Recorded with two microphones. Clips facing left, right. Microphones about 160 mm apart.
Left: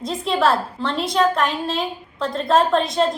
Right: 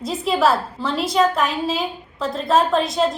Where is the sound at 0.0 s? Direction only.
5° right (ahead or behind).